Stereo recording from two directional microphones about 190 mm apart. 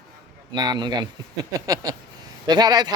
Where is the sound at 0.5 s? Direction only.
20° right (ahead or behind).